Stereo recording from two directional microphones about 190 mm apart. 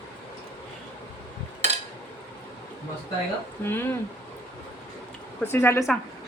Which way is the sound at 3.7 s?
10° left (ahead or behind).